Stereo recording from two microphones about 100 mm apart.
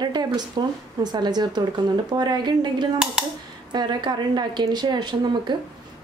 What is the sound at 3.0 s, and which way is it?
Cutlery, 5° right (ahead or behind).